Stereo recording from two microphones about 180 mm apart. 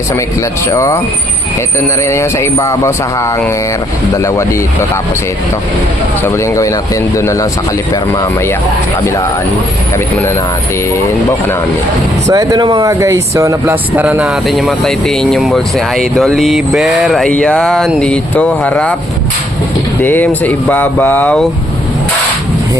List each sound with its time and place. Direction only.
0.7 s speech: 15° left (ahead or behind)
2.0 s speech: 15° left (ahead or behind)
6.2 s speech: 15° left (ahead or behind)
12.3 s speech: 20° right (ahead or behind); by 18.9 s 5° left (ahead or behind)
20.0 s speech: 10° left (ahead or behind)